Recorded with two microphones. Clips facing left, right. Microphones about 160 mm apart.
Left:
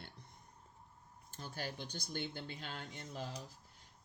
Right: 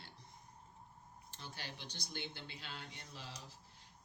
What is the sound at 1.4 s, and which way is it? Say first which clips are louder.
Speech: left 6 dB; 45° left (ahead or behind).